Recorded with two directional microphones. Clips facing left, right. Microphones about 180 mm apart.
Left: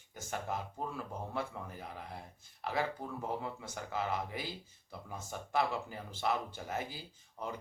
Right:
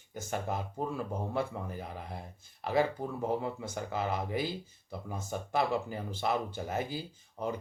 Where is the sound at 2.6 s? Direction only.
30° right (ahead or behind).